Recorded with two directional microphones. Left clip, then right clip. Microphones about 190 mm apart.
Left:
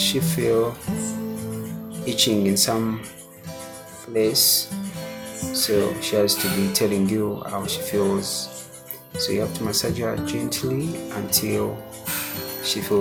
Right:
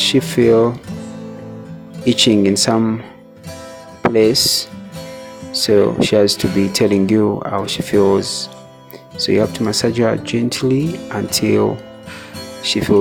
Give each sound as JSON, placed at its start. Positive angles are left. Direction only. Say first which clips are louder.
{"t": 0.0, "sound": "speech", "louder": "right 9 dB", "side_deg": -45}
{"t": 2.0, "sound": "speech", "louder": "right 8 dB", "side_deg": -45}
{"t": 4.1, "sound": "speech", "louder": "right 6 dB", "side_deg": -45}
{"t": 10.8, "sound": "speech", "louder": "right 7 dB", "side_deg": 0}
{"t": 11.1, "sound": "speech", "louder": "right 9 dB", "side_deg": -45}